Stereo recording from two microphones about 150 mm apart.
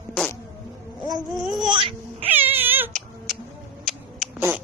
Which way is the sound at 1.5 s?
Centre (ahead or behind).